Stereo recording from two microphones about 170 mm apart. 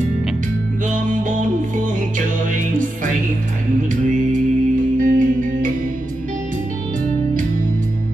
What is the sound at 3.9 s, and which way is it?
Music, 50° right (ahead or behind).